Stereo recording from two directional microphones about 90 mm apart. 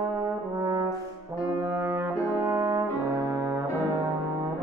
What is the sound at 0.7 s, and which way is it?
Brass instrument, 40° right (ahead or behind).